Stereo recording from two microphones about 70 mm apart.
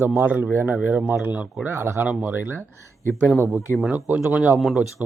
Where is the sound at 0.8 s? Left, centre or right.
Centre.